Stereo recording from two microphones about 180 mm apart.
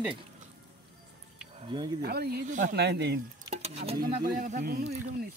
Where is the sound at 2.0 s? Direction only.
60° right (ahead or behind).